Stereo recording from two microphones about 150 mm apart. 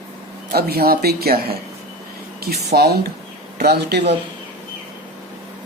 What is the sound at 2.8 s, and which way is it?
Speech, 90° right.